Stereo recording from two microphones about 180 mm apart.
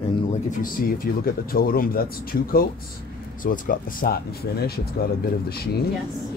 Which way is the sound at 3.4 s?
50° left (ahead or behind).